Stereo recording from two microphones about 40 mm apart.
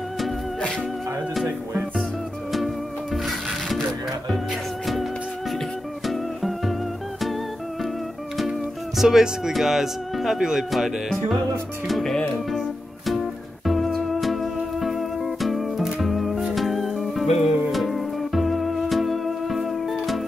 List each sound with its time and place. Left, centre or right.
0.6 s music: left
2.5 s music: centre
6.0 s music: centre
8.4 s speech: centre
13.0 s music: centre